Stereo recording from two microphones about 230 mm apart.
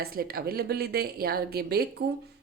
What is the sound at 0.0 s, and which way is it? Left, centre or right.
Speech, right.